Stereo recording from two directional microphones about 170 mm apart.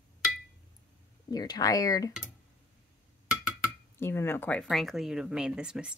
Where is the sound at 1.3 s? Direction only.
25° left (ahead or behind).